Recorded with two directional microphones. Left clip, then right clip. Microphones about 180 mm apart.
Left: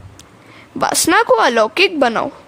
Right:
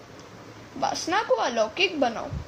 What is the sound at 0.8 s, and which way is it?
A woman's voice, 55° left (ahead or behind).